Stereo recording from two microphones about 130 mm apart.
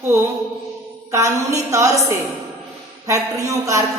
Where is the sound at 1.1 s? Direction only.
25° right (ahead or behind).